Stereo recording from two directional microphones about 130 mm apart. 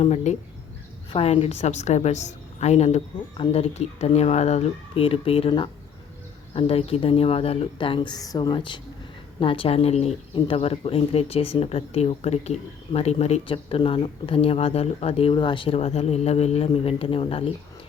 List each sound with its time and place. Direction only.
0.0 s a woman's voice: 60° left (ahead or behind)